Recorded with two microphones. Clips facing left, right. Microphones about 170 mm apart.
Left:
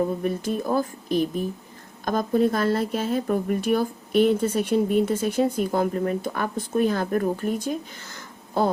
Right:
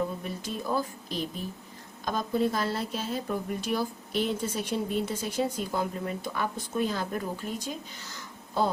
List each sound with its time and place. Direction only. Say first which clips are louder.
0.2 s a woman's voice: left 10 dB; 55° left (ahead or behind)